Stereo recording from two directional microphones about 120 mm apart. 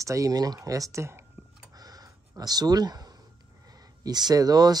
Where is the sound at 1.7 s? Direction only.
30° right (ahead or behind).